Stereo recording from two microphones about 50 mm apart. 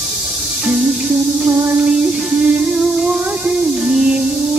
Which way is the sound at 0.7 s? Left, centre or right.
Centre.